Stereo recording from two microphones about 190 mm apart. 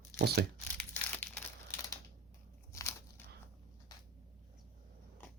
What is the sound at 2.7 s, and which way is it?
Biting, 15° left (ahead or behind).